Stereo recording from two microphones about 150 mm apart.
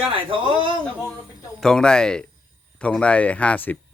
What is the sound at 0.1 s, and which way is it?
Speech, 35° right (ahead or behind).